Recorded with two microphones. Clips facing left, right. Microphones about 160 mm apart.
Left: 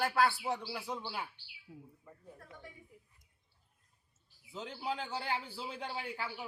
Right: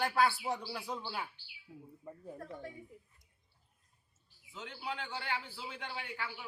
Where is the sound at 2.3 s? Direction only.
30° right (ahead or behind).